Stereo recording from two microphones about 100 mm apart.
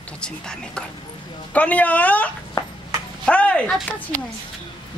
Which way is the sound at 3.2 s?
10° left (ahead or behind).